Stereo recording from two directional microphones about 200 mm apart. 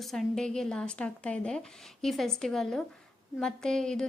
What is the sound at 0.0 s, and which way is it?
A woman's voice, centre (ahead or behind).